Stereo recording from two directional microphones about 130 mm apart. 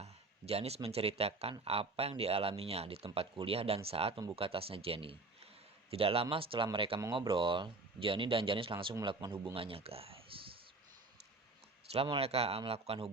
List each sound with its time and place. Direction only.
0.0 s speech: 50° right (ahead or behind)
11.9 s speech: 45° right (ahead or behind)